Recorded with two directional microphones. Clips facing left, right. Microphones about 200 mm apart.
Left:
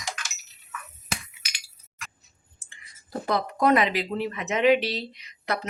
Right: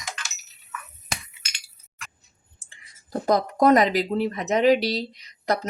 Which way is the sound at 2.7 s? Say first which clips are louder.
Right 4 dB; 40° right (ahead or behind).